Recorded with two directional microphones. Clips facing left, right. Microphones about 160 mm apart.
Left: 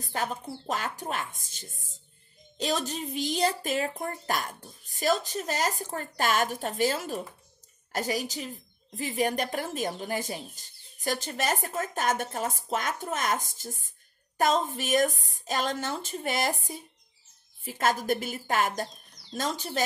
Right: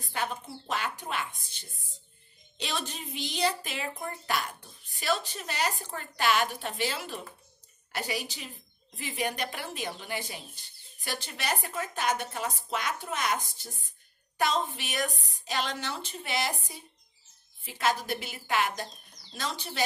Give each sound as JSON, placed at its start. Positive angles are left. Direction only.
{"t": 0.1, "sound": "speech", "side_deg": 40}
{"t": 17.6, "sound": "speech", "side_deg": 45}